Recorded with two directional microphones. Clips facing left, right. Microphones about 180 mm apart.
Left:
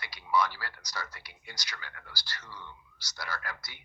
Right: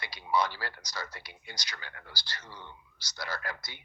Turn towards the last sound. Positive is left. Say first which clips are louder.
# right 2 dB
turn(degrees=-25)  # may be behind; listen again after turning